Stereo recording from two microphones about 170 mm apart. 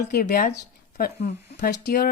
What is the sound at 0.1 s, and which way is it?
A woman's voice, 55° left (ahead or behind).